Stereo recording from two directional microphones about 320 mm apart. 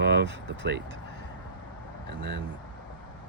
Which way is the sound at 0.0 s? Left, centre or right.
Right.